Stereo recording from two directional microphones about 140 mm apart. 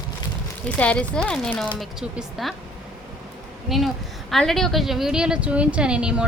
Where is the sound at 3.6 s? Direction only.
Centre (ahead or behind).